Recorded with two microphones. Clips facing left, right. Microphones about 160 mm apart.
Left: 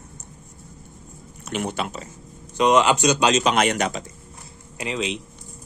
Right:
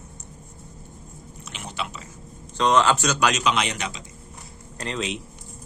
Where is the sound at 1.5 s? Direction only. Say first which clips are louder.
Left 8 dB; 50° left (ahead or behind).